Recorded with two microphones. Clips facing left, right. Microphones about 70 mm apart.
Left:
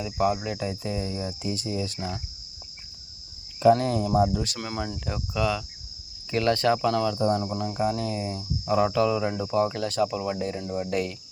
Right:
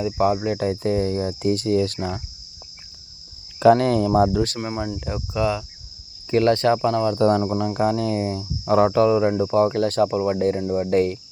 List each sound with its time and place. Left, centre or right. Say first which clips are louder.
0.0 s cricket: right 5 dB; right
3.6 s speech: right 5 dB; right
4.9 s cricket: right 4 dB; right
7.2 s speech: right 6 dB; right
7.4 s cricket: right 6 dB; right
10.6 s cricket: right 7 dB; right
10.8 s cricket: right 11 dB; right